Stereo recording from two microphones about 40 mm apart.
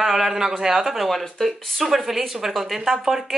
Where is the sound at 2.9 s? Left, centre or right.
Centre.